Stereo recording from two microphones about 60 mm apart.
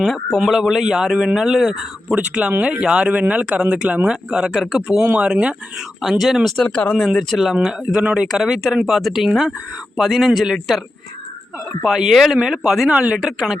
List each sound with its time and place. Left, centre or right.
0.3 s speech: centre
2.1 s speech: centre
5.0 s speech: right
6.0 s speech: centre
6.6 s speech: centre
7.0 s speech: centre
8.0 s speech: centre
11.8 s speech: centre
12.9 s speech: centre
13.1 s speech: centre